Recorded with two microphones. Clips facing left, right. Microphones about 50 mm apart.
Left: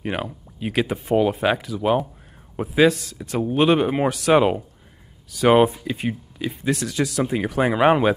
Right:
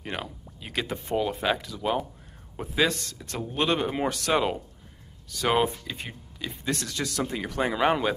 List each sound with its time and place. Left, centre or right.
0.0 s speech: left
0.7 s speech: centre
3.2 s speech: centre
4.4 s speech: left
6.5 s speech: centre; by 8.1 s left